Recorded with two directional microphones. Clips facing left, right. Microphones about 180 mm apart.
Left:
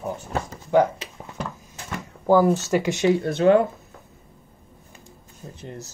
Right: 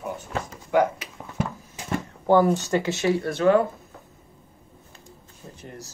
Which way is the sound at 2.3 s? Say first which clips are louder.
Left 1 dB; centre (ahead or behind).